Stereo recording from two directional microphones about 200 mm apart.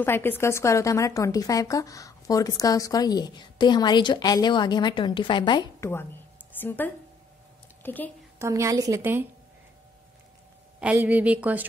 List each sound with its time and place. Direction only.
0.0 s a woman's voice: 10° left (ahead or behind)
8.4 s a woman's voice: 15° right (ahead or behind)
10.8 s a woman's voice: 10° right (ahead or behind)